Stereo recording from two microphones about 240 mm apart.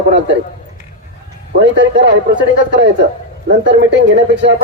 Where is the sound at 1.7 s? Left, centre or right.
Right.